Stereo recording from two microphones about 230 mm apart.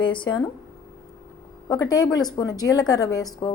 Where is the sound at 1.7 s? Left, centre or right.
Centre.